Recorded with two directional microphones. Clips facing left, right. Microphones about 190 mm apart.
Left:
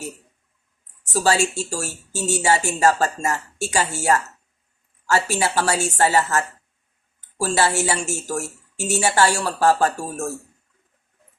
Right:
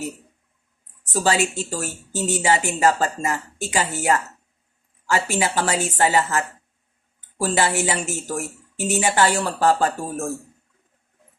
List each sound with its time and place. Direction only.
1.1 s a woman's voice: 20° right (ahead or behind)